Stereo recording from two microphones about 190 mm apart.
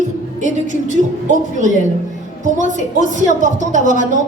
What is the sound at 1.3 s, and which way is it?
A woman's voice, 40° right (ahead or behind).